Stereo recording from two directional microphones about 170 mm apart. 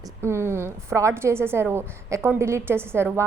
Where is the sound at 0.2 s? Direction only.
15° right (ahead or behind).